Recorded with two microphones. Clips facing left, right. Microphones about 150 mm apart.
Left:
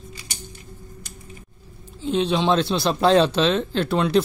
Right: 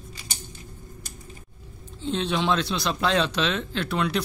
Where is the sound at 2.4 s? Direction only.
30° left (ahead or behind).